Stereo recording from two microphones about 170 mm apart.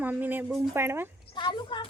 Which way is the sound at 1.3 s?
25° left (ahead or behind).